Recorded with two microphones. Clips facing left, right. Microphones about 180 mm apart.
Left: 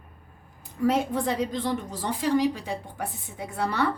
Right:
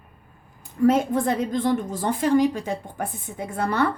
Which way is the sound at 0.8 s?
50° right (ahead or behind).